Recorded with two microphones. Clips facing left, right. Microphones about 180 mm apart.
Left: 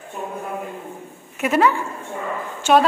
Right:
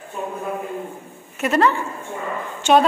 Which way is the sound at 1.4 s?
10° left (ahead or behind).